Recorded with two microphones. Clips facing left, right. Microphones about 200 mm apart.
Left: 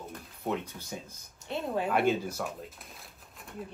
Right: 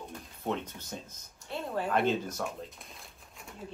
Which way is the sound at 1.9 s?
10° left (ahead or behind).